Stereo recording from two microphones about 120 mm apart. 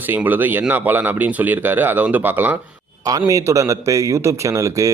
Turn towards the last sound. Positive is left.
turn(degrees=-25)  # may be behind; listen again after turning